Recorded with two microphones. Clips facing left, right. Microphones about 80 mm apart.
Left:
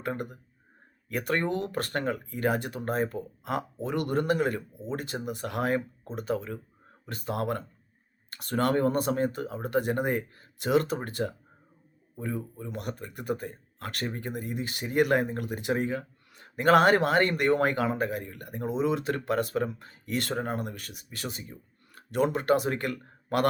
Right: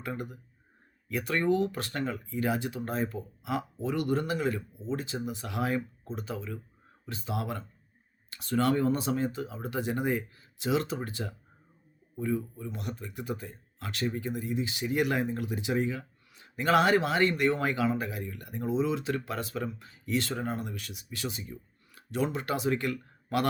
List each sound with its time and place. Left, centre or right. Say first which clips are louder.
0.0 s speech: left 3 dB; left